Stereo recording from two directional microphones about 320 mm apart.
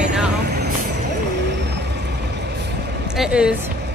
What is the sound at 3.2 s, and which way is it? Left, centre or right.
Speech, centre.